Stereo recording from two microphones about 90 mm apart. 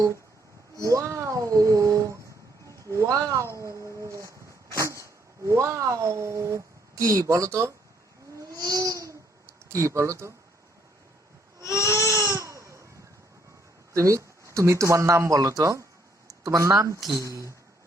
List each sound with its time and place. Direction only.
0.8 s speech: 35° right (ahead or behind)
8.4 s babbling: 40° right (ahead or behind)
9.6 s speech: 35° right (ahead or behind)
11.6 s baby cry: 35° left (ahead or behind)
11.9 s baby cry: 35° right (ahead or behind)
13.9 s speech: 35° right (ahead or behind)